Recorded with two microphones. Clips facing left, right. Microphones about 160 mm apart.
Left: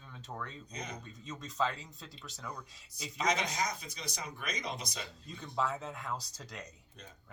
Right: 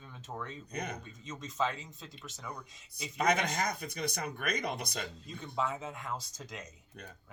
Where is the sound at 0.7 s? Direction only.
55° right (ahead or behind).